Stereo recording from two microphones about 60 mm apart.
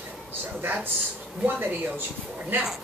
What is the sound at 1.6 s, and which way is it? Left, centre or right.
Speech, right.